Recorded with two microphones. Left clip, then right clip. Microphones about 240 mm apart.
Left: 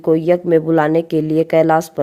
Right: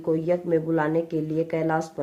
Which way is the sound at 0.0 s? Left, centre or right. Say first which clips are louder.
Left 10 dB; left.